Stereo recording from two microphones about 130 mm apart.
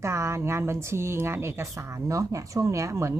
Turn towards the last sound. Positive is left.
turn(degrees=-20)  # may be behind; listen again after turning